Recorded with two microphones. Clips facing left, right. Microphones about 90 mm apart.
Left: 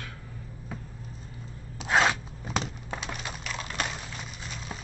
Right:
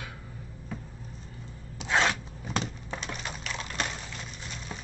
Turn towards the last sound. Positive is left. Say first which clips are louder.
# left 1 dB
turn(degrees=5)  # may be behind; listen again after turning